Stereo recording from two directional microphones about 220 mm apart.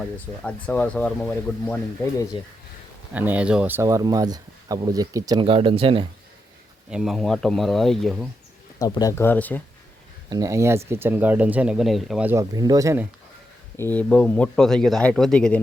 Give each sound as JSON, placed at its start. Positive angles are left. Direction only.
{"t": 0.4, "sound": "speech", "side_deg": 5}
{"t": 3.2, "sound": "speech", "side_deg": -5}
{"t": 6.9, "sound": "speech", "side_deg": 0}
{"t": 8.8, "sound": "speech", "side_deg": 15}
{"t": 10.2, "sound": "speech", "side_deg": -15}
{"t": 13.7, "sound": "speech", "side_deg": 10}